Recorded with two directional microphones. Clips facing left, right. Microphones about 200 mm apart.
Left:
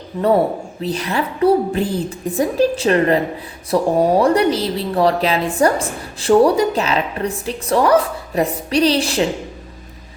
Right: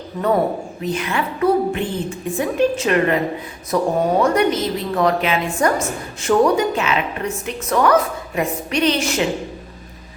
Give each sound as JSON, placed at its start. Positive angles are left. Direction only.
{"t": 0.8, "sound": "a woman's voice", "side_deg": 35}